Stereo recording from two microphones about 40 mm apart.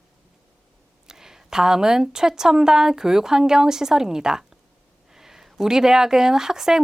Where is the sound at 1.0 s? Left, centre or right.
Centre.